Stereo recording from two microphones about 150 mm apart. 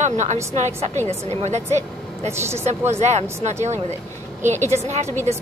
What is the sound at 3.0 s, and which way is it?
A woman's voice, 45° right (ahead or behind).